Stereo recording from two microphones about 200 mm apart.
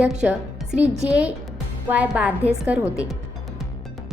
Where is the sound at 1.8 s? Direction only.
5° right (ahead or behind).